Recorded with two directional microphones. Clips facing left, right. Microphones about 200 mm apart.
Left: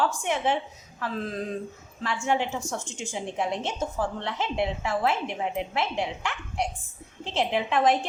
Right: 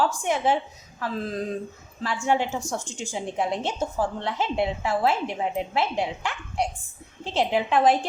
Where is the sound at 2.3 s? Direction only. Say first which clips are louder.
Right 3 dB; 40° right (ahead or behind).